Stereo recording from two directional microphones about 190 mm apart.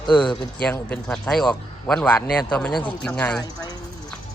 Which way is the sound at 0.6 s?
5° left (ahead or behind).